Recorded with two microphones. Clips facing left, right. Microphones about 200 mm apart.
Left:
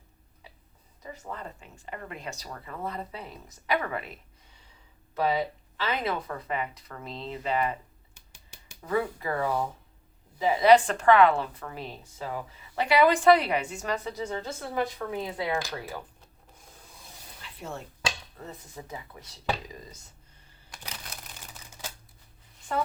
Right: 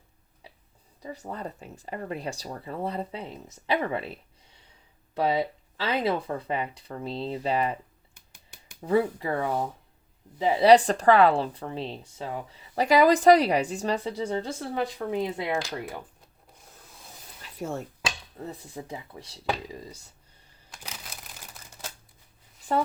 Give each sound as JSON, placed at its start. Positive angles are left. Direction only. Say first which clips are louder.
{"t": 1.1, "sound": "a woman's voice", "louder": "right 4 dB", "side_deg": -35}
{"t": 8.8, "sound": "a woman's voice", "louder": "right 5 dB", "side_deg": -30}
{"t": 17.6, "sound": "speech", "louder": "right 6 dB", "side_deg": -45}
{"t": 18.5, "sound": "a woman's voice", "louder": "right 3 dB", "side_deg": -30}
{"t": 20.7, "sound": "a sound", "louder": "even", "side_deg": 0}
{"t": 22.7, "sound": "a woman's voice", "louder": "right 4 dB", "side_deg": -35}